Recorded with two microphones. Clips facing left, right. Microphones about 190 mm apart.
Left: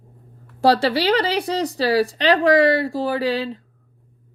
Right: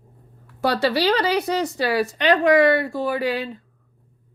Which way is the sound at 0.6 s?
30° left (ahead or behind).